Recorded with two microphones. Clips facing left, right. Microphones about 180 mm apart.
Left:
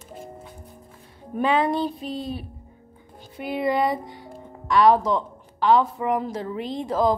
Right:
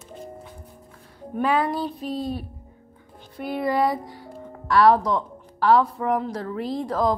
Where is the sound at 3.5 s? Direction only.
Centre (ahead or behind).